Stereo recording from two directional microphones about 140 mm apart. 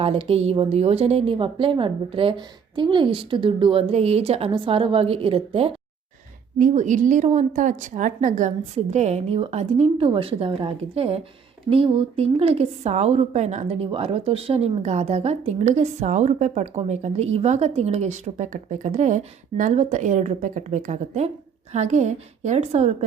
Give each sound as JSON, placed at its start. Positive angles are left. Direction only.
{"t": 0.0, "sound": "a woman's voice", "side_deg": -45}
{"t": 6.6, "sound": "a woman's voice", "side_deg": -65}